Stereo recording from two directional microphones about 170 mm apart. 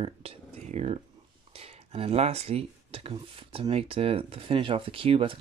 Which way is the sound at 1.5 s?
35° right (ahead or behind).